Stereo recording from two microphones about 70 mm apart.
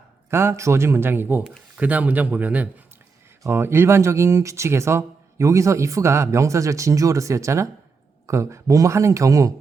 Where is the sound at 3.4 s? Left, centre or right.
Right.